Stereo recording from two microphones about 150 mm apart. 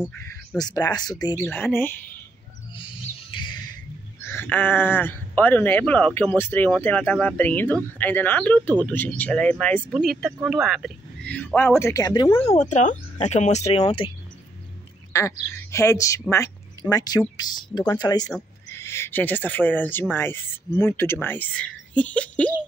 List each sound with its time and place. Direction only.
0.6 s speech: 25° left (ahead or behind)
1.4 s speech: 15° left (ahead or behind)
2.7 s bird: 35° left (ahead or behind)
4.3 s speech: 15° left (ahead or behind)
11.8 s speech: 25° left (ahead or behind)
12.3 s speech: 15° left (ahead or behind)
12.5 s speech: 55° left (ahead or behind); by 14.1 s 35° left (ahead or behind)
15.1 s speech: 20° left (ahead or behind)